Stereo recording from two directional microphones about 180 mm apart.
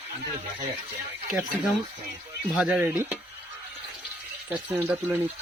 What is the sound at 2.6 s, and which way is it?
Speech, 10° right (ahead or behind).